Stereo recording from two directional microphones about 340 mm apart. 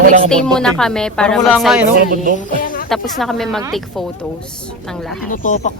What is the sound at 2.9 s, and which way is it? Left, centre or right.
A woman's voice, centre.